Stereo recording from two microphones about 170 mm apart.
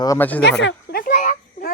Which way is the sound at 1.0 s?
45° left (ahead or behind).